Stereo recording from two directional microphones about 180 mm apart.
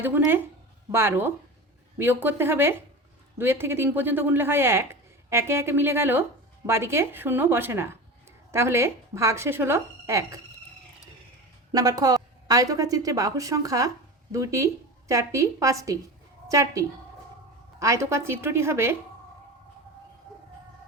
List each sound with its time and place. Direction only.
0.0 s speech: 10° right (ahead or behind)
11.7 s a woman's voice: 20° right (ahead or behind)